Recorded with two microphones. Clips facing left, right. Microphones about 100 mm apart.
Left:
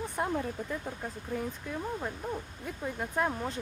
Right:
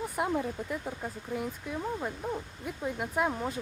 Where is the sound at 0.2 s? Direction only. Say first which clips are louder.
Right 2 dB; 10° right (ahead or behind).